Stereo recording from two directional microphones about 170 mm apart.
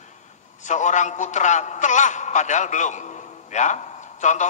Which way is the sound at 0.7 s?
45° left (ahead or behind).